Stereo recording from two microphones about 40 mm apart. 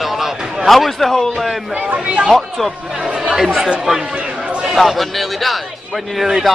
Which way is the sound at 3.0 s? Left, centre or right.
Centre.